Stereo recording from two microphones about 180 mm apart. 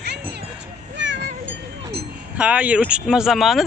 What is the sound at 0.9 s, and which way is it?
Cat, 85° right.